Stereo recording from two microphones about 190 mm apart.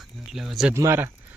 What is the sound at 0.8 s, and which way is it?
Speech, 15° right (ahead or behind).